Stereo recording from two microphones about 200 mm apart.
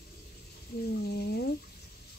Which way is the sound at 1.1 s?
55° left (ahead or behind).